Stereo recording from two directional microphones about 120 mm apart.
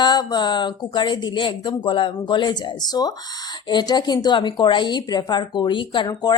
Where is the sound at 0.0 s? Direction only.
35° left (ahead or behind).